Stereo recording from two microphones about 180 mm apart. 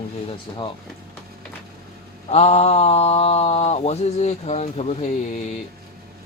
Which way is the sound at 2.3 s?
35° left (ahead or behind).